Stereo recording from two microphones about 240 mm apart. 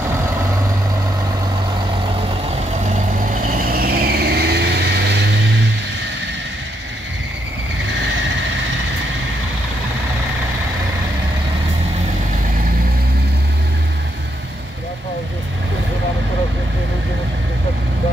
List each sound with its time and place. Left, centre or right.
2.9 s vehicle: right